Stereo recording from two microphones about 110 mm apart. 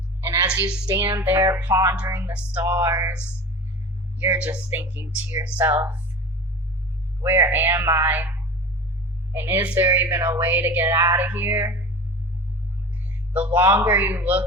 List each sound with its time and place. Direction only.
0.4 s a woman's voice: 10° right (ahead or behind)
0.9 s a woman's voice: 25° right (ahead or behind)
7.2 s a woman's voice: 20° right (ahead or behind)
13.1 s speech: 15° right (ahead or behind)